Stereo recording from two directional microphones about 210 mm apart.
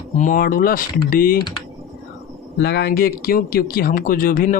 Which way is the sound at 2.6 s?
50° left (ahead or behind).